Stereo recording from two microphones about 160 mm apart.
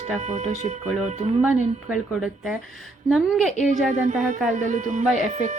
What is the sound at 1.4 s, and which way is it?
A woman's voice, 5° right (ahead or behind).